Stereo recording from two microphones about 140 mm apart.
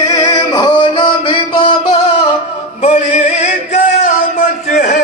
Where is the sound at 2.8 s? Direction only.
55° left (ahead or behind).